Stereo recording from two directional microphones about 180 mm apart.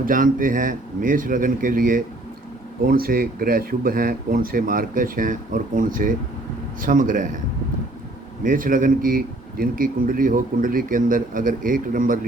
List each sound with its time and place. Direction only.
0.0 s a man's voice: 50° right (ahead or behind)
8.4 s a man's voice: 50° right (ahead or behind)